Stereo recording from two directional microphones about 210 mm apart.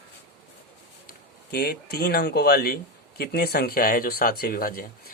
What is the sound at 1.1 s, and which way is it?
Speech, 50° left (ahead or behind).